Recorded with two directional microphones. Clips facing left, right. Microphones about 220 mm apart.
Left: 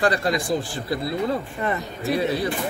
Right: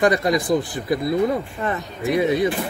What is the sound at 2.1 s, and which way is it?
Speech, 20° right (ahead or behind).